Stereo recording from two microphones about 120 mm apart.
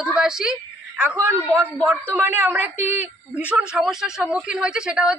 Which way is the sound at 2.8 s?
70° left (ahead or behind).